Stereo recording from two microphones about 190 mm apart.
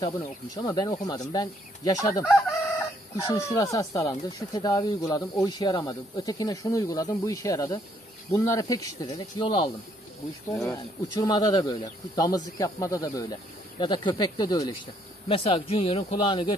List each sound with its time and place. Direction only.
0.6 s speech: 20° left (ahead or behind)
10.7 s speech: 20° left (ahead or behind)